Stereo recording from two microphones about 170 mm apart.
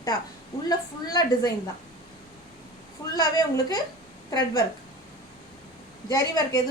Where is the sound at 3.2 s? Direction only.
20° left (ahead or behind).